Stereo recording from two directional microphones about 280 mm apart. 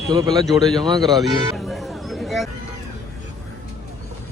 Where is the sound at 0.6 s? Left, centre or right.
Centre.